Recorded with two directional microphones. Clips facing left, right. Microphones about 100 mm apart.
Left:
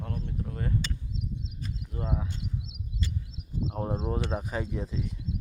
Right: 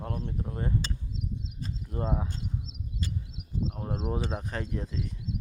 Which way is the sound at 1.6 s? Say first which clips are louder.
Right 4 dB; 35° right (ahead or behind).